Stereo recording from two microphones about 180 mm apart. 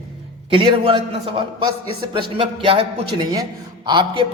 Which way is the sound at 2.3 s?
30° right (ahead or behind).